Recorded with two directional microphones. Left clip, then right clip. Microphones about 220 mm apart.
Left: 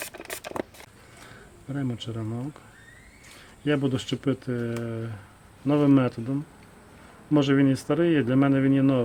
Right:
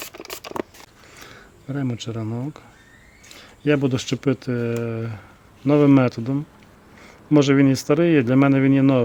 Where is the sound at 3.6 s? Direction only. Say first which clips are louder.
Right 6 dB; 45° right (ahead or behind).